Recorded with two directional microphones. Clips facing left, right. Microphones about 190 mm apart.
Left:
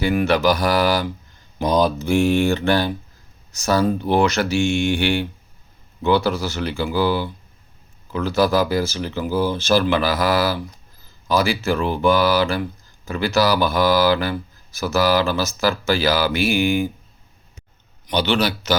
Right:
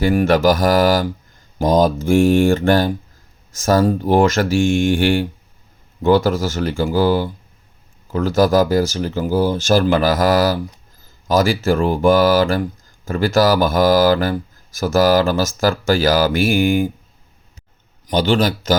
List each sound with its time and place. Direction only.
0.0 s speech: 45° right (ahead or behind)
18.0 s speech: 45° right (ahead or behind)